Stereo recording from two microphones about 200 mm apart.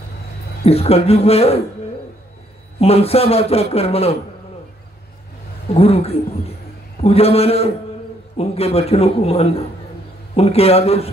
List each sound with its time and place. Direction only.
0.7 s a man's voice: 30° left (ahead or behind)
2.8 s a man's voice: 30° left (ahead or behind)
5.7 s a man's voice: 30° left (ahead or behind)